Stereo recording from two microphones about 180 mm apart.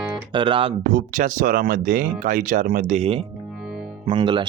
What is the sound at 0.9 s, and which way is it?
Speech, 45° right (ahead or behind).